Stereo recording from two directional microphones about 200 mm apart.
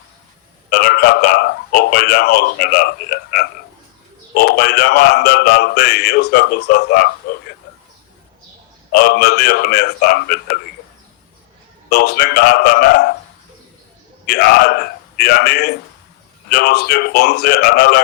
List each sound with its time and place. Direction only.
0.7 s a man's voice: 50° left (ahead or behind)
8.9 s speech: 50° left (ahead or behind)
11.9 s speech: 55° left (ahead or behind)
14.3 s speech: 50° left (ahead or behind)